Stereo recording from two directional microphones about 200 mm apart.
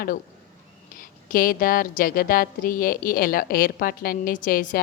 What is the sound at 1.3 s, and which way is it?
A woman's voice, 45° left (ahead or behind).